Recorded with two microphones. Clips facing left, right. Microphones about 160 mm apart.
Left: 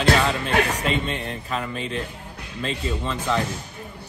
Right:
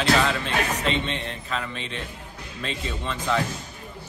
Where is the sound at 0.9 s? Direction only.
45° left (ahead or behind).